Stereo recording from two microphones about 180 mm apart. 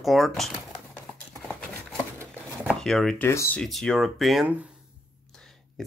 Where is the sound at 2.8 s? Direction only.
Centre (ahead or behind).